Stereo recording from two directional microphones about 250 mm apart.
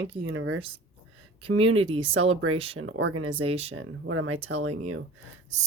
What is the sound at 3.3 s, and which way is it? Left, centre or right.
Speech, right.